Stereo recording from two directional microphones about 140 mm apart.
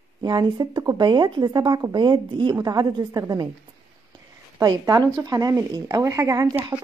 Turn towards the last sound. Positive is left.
turn(degrees=-25)  # may be behind; listen again after turning